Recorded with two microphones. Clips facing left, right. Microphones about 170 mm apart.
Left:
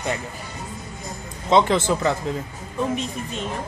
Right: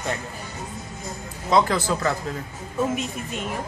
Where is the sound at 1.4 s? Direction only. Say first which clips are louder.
Left 3 dB; 20° left (ahead or behind).